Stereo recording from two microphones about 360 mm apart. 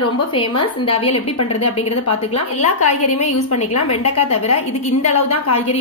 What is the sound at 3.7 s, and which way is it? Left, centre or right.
Speech, left.